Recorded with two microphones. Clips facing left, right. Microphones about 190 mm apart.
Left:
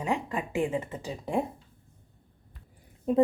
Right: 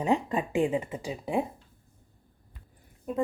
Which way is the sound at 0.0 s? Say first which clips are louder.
Right 4 dB; 20° right (ahead or behind).